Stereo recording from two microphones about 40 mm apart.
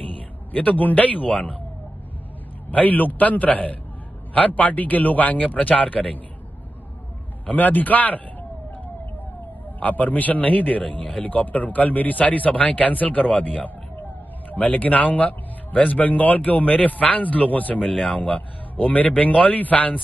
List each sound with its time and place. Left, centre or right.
0.5 s a man's voice: left
2.7 s a man's voice: left
7.4 s a man's voice: left
9.8 s a man's voice: left
10.8 s speech: left
11.2 s a man's voice: left
14.5 s a man's voice: left